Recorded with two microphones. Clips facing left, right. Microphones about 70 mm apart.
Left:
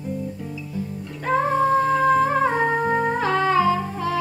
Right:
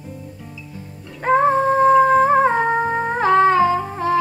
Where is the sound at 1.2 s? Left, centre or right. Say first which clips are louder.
Right 4 dB; right.